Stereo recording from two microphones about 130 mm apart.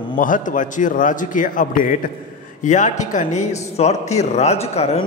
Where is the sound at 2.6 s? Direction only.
70° left (ahead or behind).